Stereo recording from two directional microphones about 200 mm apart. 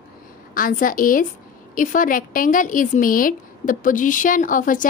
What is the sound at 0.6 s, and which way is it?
A woman's voice, 45° left (ahead or behind).